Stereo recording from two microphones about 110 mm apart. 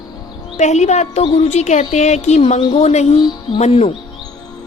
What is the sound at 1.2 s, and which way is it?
Speech, 70° left (ahead or behind).